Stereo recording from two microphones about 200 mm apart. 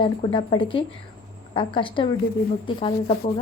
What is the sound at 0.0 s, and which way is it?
A woman's voice, 25° left (ahead or behind).